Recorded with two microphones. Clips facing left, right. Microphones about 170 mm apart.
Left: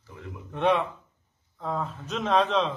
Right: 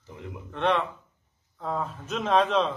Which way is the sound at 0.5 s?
10° left (ahead or behind).